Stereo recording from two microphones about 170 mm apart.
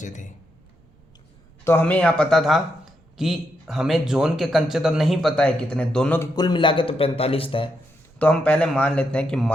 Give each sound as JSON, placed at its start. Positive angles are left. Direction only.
{"t": 0.0, "sound": "speech", "side_deg": 45}
{"t": 1.6, "sound": "speech", "side_deg": 10}
{"t": 6.1, "sound": "a man's voice", "side_deg": 25}
{"t": 8.2, "sound": "speech", "side_deg": 5}